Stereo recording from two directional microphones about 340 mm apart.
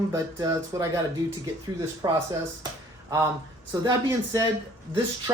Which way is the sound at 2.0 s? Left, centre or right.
Centre.